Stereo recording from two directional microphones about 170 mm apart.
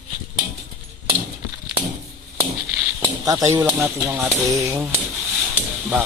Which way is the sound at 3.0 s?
20° right (ahead or behind).